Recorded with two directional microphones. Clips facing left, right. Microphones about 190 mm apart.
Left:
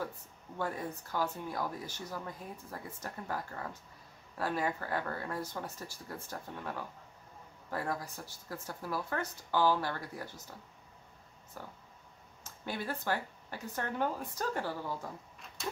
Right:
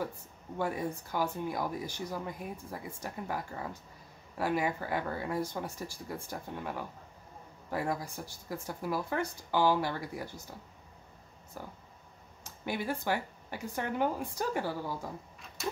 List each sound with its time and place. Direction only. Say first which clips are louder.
0.6 s speech: right 4 dB; 10° right (ahead or behind)
11.6 s speech: right 3 dB; 10° right (ahead or behind)